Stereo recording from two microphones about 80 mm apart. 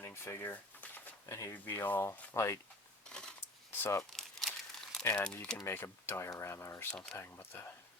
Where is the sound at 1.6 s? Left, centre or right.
Left.